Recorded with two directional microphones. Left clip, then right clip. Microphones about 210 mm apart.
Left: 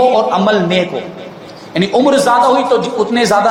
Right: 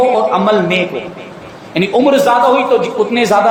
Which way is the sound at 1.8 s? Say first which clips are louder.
Right 1 dB; 15° left (ahead or behind).